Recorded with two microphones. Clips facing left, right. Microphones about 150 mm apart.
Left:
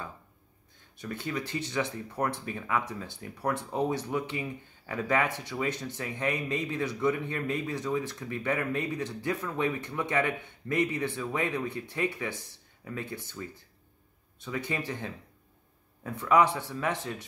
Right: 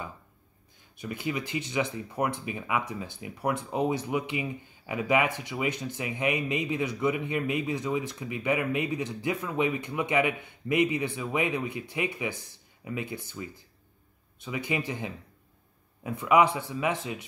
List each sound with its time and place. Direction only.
0.9 s speech: 10° right (ahead or behind)